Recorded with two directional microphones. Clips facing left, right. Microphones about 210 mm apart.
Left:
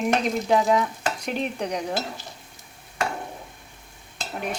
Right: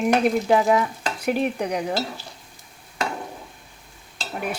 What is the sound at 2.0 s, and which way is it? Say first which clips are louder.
Stir: right 2 dB; 20° left (ahead or behind).